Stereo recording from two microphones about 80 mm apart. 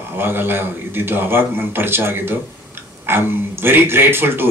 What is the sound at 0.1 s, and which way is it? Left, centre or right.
A man's voice, right.